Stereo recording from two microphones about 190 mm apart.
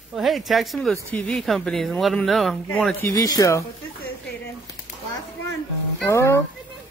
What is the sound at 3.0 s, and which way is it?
Speech, 20° left (ahead or behind).